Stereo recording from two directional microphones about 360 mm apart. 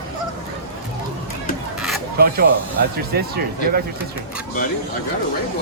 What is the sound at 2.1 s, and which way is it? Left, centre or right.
Speech, right.